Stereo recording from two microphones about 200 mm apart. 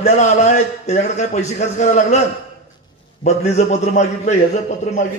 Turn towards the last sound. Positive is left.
turn(degrees=35)  # may be behind; listen again after turning